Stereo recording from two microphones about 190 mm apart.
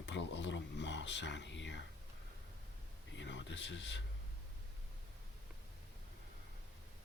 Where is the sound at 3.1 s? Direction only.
75° left (ahead or behind).